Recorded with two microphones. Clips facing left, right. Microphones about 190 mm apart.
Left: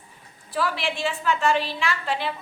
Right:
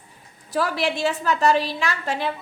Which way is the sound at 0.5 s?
40° right (ahead or behind).